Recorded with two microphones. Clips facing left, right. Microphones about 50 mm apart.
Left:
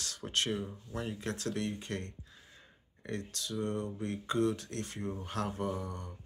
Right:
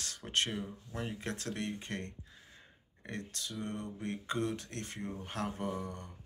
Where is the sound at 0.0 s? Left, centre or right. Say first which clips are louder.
Even; right.